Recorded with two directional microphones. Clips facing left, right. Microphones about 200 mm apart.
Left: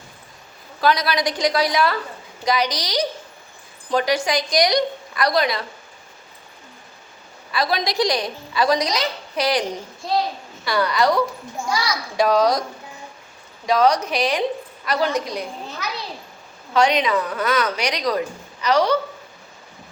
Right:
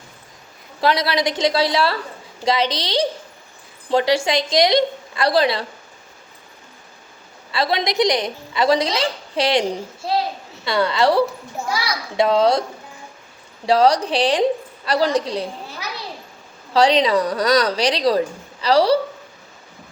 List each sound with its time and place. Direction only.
0.8 s a woman's voice: 25° right (ahead or behind)
7.5 s a woman's voice: 25° right (ahead or behind)
10.7 s a woman's voice: 25° right (ahead or behind)
13.7 s a woman's voice: 30° right (ahead or behind)
16.7 s a woman's voice: 35° right (ahead or behind)